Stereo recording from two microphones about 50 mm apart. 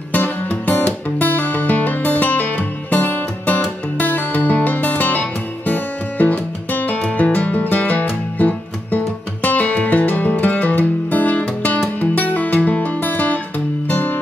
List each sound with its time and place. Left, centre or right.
0.1 s music: left